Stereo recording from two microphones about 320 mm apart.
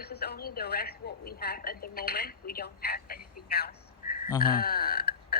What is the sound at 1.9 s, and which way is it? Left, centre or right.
A woman's voice, left.